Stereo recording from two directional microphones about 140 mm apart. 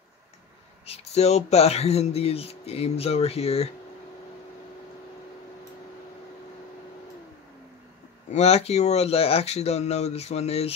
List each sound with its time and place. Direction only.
0.8 s speech: 50° left (ahead or behind)
8.3 s speech: 50° left (ahead or behind)